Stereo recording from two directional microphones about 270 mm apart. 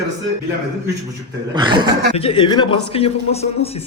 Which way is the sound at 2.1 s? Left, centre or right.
Centre.